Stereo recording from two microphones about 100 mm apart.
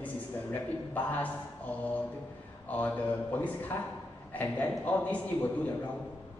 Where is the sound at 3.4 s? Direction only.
15° left (ahead or behind).